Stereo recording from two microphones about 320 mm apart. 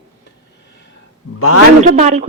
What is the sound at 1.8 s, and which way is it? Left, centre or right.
Speech, right.